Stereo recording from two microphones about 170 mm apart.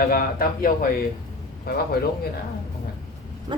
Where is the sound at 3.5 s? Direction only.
30° right (ahead or behind).